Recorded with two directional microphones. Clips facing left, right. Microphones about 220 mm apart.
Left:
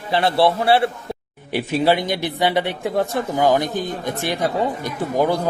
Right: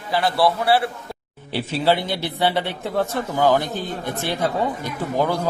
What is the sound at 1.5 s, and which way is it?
Speech, 15° left (ahead or behind).